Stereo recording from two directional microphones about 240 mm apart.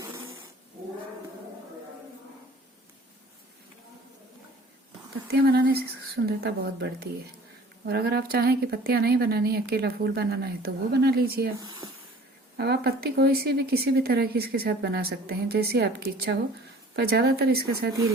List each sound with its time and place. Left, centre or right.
5.3 s speech: right
12.5 s speech: right